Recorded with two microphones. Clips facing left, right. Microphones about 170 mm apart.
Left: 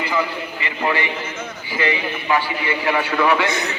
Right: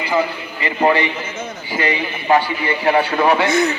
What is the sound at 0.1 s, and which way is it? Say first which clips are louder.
A man's voice: right 3 dB; 40° right (ahead or behind).